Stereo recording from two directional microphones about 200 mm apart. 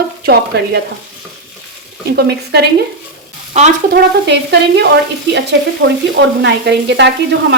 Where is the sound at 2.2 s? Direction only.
55° right (ahead or behind).